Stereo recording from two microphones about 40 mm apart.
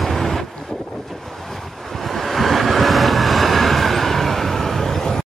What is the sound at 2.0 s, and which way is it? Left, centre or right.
Vehicle, centre.